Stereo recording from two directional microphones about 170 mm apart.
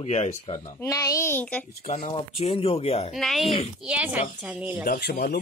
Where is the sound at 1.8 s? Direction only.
40° left (ahead or behind).